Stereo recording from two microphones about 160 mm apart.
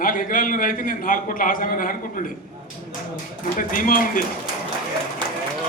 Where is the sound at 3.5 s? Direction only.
60° left (ahead or behind).